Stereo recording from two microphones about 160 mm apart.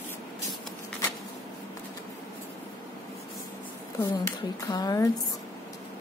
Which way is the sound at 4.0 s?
20° left (ahead or behind).